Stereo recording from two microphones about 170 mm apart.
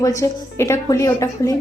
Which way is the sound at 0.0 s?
20° left (ahead or behind).